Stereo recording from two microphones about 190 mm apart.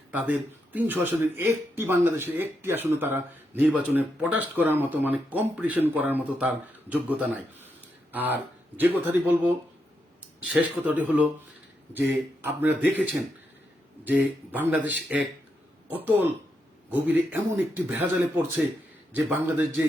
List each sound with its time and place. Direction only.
0.1 s speech: 10° right (ahead or behind)